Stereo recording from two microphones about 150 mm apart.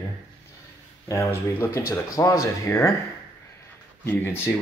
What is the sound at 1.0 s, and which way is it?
Speech, 20° left (ahead or behind).